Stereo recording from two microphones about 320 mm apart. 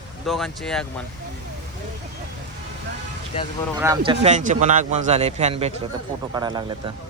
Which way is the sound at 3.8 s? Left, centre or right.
Centre.